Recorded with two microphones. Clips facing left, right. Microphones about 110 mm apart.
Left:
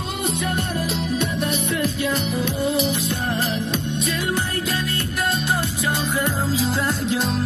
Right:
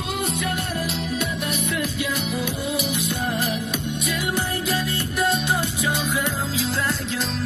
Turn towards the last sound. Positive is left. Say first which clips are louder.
# left 3 dB
turn(degrees=0)  # may be behind; listen again after turning